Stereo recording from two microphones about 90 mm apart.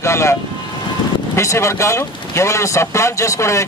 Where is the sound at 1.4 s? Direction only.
35° left (ahead or behind).